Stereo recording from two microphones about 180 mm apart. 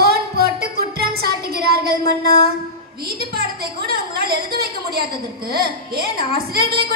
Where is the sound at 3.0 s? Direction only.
60° right (ahead or behind).